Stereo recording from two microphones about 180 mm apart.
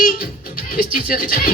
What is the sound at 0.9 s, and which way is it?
Speech, 50° left (ahead or behind).